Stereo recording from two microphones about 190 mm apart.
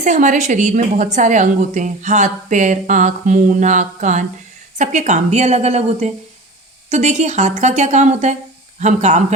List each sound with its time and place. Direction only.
0.0 s a woman's voice: 40° right (ahead or behind)